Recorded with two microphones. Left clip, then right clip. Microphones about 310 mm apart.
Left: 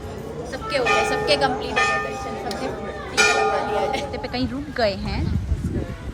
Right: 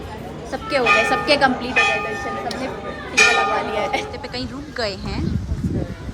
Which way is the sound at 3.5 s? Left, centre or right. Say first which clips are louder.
Right 1 dB; centre.